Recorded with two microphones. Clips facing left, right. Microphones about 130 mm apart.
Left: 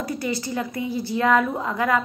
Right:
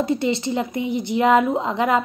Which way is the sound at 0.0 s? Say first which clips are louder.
Right 6 dB; 25° right (ahead or behind).